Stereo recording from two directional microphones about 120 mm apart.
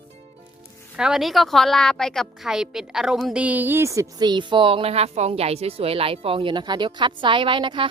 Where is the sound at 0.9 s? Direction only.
5° right (ahead or behind).